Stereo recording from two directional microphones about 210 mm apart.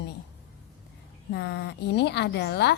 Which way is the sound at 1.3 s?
50° left (ahead or behind).